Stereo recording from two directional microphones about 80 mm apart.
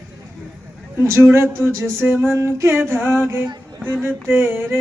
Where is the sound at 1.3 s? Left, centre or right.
Right.